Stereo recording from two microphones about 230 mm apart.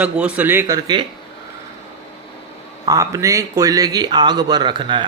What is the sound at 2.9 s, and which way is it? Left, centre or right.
Speech, centre.